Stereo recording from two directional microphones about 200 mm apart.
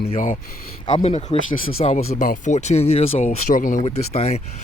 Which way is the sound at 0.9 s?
35° left (ahead or behind).